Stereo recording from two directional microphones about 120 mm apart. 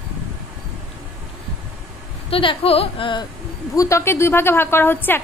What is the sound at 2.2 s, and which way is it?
A woman's voice, 50° left (ahead or behind).